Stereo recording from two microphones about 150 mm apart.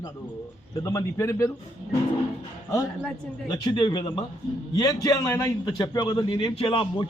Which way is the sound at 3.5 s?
25° left (ahead or behind).